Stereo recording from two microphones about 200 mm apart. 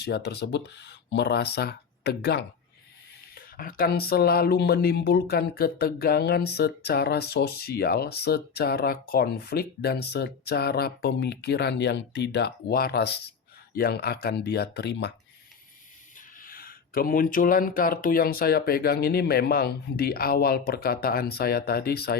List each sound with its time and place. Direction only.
0.0 s speech: 55° left (ahead or behind)
16.1 s speech: 45° left (ahead or behind)